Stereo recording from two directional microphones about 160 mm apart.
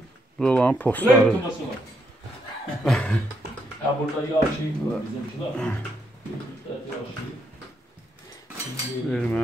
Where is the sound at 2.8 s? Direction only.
5° left (ahead or behind).